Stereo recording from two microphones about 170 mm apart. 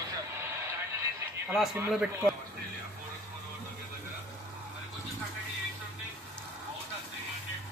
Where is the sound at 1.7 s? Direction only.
5° right (ahead or behind).